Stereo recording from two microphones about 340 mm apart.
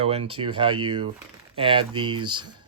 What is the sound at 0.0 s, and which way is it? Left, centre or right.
Speech, centre.